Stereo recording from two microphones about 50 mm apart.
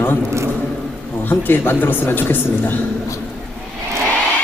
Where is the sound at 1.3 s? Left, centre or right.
Left.